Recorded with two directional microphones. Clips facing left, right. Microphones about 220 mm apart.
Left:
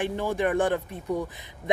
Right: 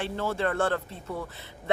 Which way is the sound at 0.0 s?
15° left (ahead or behind).